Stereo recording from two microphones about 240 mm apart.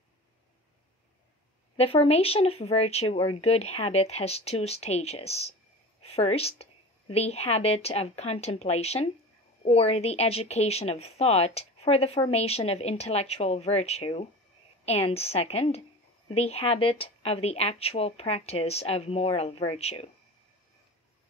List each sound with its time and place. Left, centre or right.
1.8 s speech: left